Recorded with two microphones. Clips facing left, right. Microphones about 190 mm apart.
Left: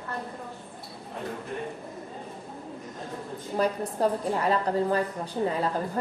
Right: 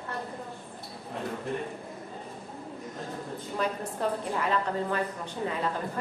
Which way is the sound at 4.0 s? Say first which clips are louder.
Left 4 dB; 40° left (ahead or behind).